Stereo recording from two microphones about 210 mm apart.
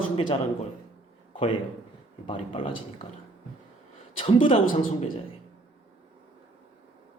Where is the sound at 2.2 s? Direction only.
25° left (ahead or behind).